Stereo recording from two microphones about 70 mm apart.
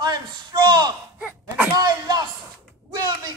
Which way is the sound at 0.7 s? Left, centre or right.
Right.